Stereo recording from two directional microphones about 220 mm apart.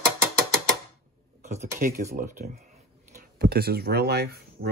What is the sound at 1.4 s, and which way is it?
Speech, 35° right (ahead or behind).